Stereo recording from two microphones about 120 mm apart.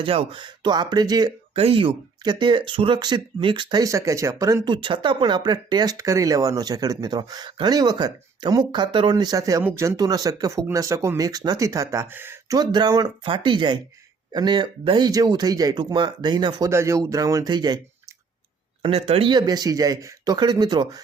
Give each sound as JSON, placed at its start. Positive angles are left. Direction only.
{"t": 0.0, "sound": "speech", "side_deg": -50}
{"t": 1.5, "sound": "speech", "side_deg": -50}
{"t": 4.7, "sound": "speech", "side_deg": -40}
{"t": 12.5, "sound": "speech", "side_deg": -35}
{"t": 16.6, "sound": "speech", "side_deg": -25}
{"t": 18.8, "sound": "speech", "side_deg": -55}
{"t": 19.3, "sound": "speech", "side_deg": -35}